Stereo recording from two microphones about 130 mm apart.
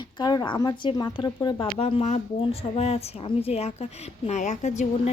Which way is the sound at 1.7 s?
50° left (ahead or behind).